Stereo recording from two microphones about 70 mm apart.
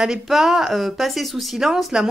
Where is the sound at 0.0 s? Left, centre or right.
Centre.